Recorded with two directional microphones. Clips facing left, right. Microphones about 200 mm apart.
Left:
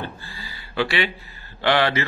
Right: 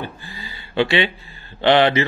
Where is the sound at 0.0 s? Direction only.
20° right (ahead or behind).